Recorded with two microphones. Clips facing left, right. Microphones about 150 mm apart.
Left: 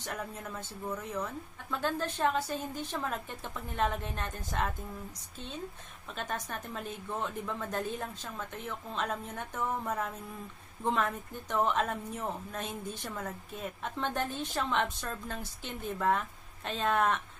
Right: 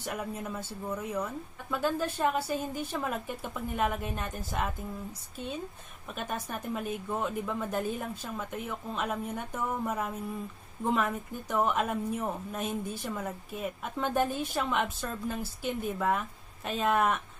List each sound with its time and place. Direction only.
0.0 s a woman's voice: 10° right (ahead or behind)
6.1 s a woman's voice: 10° right (ahead or behind)